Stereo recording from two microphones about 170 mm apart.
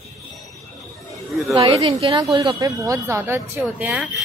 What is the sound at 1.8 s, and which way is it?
A woman's voice, 35° right (ahead or behind).